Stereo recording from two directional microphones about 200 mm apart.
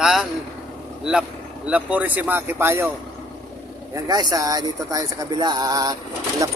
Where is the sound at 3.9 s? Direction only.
20° right (ahead or behind).